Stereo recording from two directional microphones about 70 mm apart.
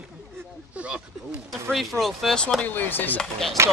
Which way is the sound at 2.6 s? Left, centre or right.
Left.